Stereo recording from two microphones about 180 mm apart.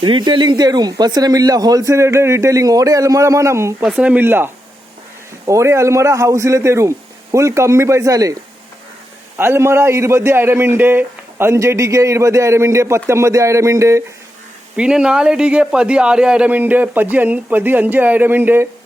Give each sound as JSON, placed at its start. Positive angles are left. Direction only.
{"t": 0.0, "sound": "a man's voice", "side_deg": -25}
{"t": 9.4, "sound": "a man's voice", "side_deg": -15}
{"t": 14.8, "sound": "a man's voice", "side_deg": -5}